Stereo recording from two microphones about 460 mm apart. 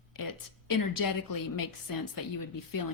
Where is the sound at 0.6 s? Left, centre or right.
Left.